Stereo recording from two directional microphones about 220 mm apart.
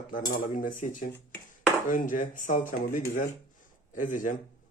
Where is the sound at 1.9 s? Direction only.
35° left (ahead or behind).